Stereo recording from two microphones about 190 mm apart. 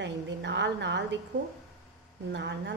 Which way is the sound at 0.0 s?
65° right (ahead or behind).